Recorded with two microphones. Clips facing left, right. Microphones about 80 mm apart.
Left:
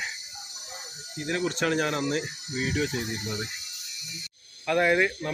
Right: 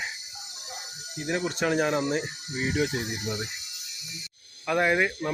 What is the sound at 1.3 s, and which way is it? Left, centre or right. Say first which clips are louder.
Speech: even; centre.